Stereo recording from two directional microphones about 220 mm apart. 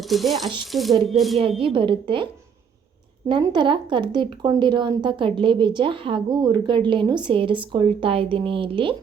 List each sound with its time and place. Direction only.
0.0 s speech: centre (ahead or behind)
1.4 s speech: 25° right (ahead or behind)
3.2 s speech: 20° right (ahead or behind)